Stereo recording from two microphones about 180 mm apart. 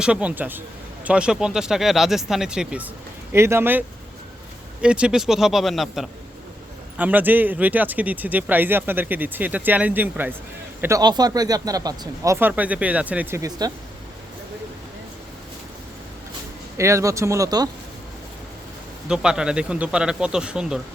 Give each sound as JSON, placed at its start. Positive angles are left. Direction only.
{"t": 0.0, "sound": "speech", "side_deg": -5}
{"t": 16.7, "sound": "speech", "side_deg": -15}
{"t": 19.0, "sound": "speech", "side_deg": -5}